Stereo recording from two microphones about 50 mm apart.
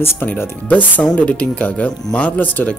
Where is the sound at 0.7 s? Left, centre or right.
Left.